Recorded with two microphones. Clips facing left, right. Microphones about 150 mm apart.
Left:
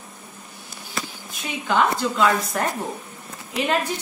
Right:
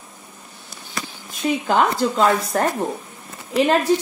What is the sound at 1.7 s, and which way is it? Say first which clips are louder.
A woman's voice: right 1 dB; 40° right (ahead or behind).